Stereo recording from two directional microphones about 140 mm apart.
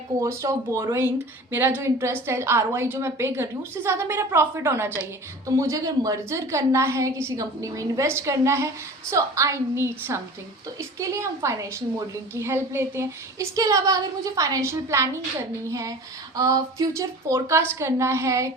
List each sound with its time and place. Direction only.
0.2 s a woman's voice: 20° right (ahead or behind)